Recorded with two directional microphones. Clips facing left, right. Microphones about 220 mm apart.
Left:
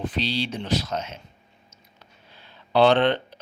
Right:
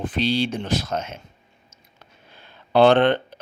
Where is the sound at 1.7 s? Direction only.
50° right (ahead or behind).